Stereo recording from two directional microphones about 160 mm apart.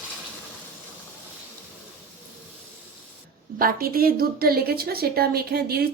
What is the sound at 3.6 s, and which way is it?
A woman's voice, 65° right (ahead or behind).